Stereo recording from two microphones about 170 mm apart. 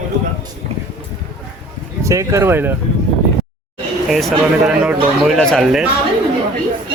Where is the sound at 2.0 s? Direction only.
15° right (ahead or behind).